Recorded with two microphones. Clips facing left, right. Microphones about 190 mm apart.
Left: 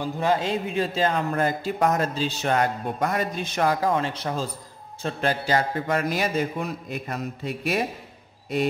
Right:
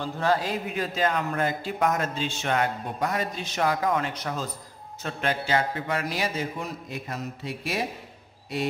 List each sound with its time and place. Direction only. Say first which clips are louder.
0.0 s a man's voice: left 2 dB; 20° left (ahead or behind); by 3.7 s 50° left (ahead or behind)
3.8 s a man's voice: left 2 dB; 30° left (ahead or behind); by 7.8 s 55° left (ahead or behind)